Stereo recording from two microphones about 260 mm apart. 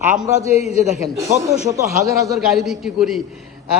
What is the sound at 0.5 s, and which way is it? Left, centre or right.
Speech, left.